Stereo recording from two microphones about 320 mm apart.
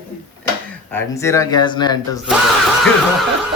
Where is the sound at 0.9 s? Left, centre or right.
Centre.